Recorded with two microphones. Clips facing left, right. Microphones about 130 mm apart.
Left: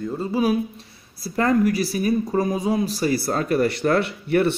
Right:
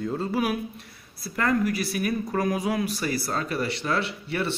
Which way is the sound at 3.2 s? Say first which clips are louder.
Left 7 dB; 45° left (ahead or behind).